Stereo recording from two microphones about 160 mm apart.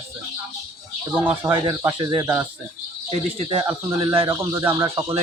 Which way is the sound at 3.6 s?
15° right (ahead or behind).